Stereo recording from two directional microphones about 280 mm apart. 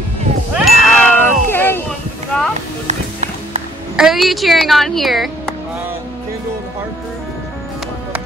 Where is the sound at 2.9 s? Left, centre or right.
Right.